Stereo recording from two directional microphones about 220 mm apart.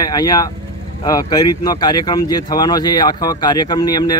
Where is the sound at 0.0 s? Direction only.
20° left (ahead or behind).